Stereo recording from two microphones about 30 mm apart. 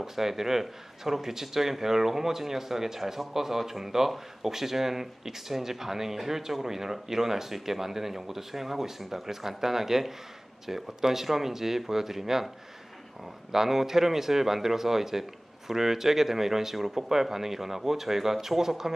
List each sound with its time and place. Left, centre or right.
0.0 s speech: centre
13.5 s speech: centre